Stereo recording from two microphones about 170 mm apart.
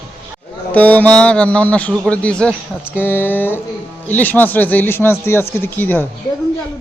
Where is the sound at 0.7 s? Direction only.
10° left (ahead or behind).